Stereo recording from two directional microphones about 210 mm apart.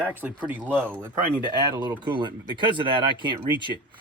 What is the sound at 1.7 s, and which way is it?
Speech, 15° right (ahead or behind).